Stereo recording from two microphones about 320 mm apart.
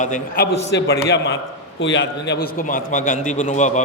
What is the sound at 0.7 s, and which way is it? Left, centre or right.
A man's voice, left.